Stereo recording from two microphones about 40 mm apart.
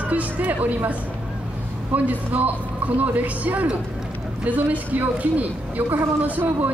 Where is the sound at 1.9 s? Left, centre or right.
Right.